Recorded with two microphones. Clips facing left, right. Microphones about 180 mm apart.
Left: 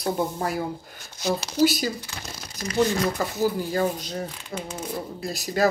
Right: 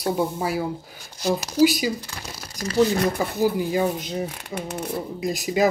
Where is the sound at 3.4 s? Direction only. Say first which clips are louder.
Right 2 dB; 15° right (ahead or behind).